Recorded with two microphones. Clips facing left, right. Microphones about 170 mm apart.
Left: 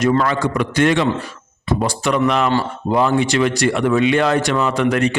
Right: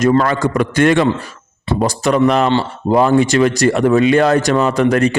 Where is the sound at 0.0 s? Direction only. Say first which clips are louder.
Right 3 dB; 45° right (ahead or behind).